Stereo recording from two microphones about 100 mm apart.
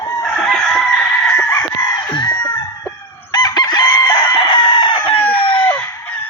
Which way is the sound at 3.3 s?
45° left (ahead or behind).